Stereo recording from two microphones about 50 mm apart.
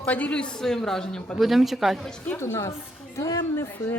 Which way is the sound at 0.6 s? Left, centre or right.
Centre.